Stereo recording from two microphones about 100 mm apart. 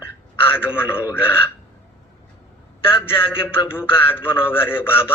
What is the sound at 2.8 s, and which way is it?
Speech, 65° left (ahead or behind).